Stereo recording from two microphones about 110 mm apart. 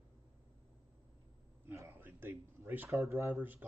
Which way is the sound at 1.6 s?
20° right (ahead or behind).